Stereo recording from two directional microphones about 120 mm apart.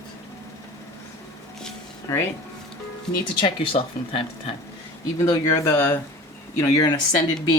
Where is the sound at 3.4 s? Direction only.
50° left (ahead or behind).